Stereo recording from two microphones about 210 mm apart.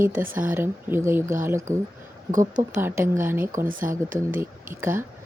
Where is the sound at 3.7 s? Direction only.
40° right (ahead or behind).